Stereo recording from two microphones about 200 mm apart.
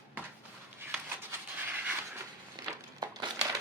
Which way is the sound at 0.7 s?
10° right (ahead or behind).